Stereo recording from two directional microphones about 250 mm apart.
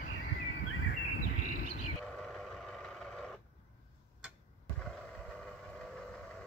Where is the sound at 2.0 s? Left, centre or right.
Centre.